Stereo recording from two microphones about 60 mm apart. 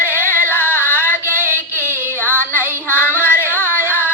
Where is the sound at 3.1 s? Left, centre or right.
Left.